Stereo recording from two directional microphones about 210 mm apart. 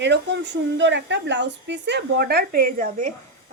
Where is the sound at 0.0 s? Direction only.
55° right (ahead or behind).